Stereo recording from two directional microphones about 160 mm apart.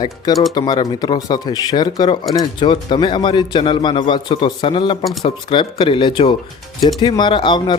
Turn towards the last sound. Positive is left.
turn(degrees=30)  # may be behind; listen again after turning